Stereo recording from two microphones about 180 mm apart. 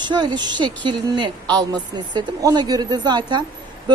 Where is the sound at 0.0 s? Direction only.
25° right (ahead or behind).